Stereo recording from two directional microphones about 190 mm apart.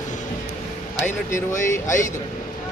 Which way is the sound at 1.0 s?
40° left (ahead or behind).